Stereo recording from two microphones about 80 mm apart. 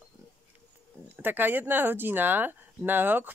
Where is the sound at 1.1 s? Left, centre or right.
Right.